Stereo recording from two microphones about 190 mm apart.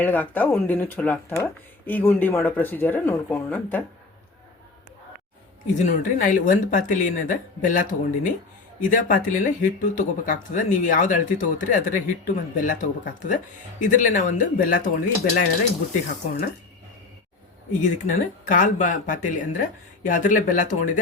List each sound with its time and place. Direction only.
0.0 s speech: 10° left (ahead or behind)
5.8 s speech: 45° left (ahead or behind)
17.7 s speech: 40° left (ahead or behind)